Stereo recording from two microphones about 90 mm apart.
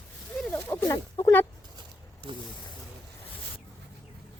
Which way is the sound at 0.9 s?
45° left (ahead or behind).